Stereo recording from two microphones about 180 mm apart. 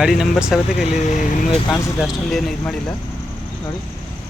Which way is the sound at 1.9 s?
Centre (ahead or behind).